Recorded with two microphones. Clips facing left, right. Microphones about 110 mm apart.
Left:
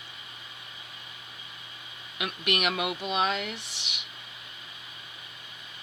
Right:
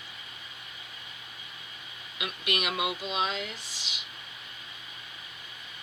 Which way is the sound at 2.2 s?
55° left (ahead or behind).